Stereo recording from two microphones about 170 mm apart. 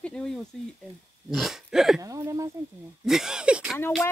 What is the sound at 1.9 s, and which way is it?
Speech, 20° right (ahead or behind).